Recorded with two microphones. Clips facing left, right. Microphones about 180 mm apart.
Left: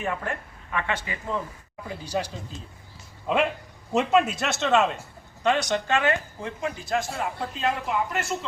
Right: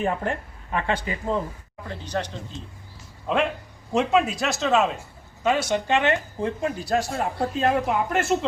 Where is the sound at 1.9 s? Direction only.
10° left (ahead or behind); by 6.1 s 20° right (ahead or behind).